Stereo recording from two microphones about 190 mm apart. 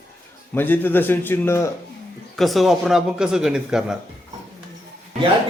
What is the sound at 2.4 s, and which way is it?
Speech, centre (ahead or behind).